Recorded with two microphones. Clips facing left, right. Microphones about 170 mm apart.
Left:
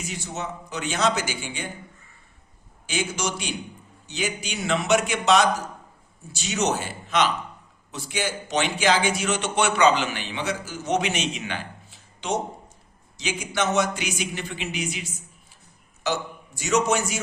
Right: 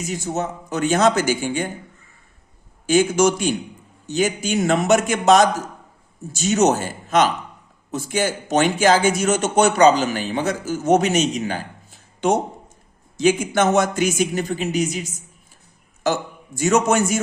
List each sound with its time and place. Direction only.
0.0 s speech: 45° right (ahead or behind)
2.8 s speech: 45° right (ahead or behind)